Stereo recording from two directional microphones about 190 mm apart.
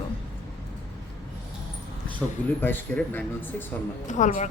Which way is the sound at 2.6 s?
10° left (ahead or behind).